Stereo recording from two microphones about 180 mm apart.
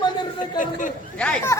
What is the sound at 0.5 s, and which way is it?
Speech, 45° left (ahead or behind).